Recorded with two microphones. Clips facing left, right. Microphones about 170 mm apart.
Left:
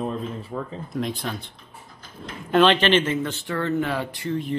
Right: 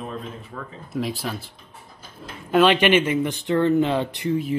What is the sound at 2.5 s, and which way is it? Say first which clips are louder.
Speech: right 1 dB; 10° right (ahead or behind).